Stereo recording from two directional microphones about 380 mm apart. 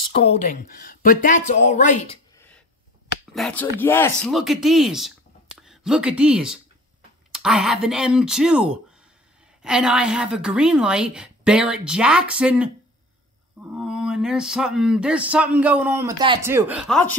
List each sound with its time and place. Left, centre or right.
0.0 s speech: centre
3.3 s speech: centre
13.7 s speech: centre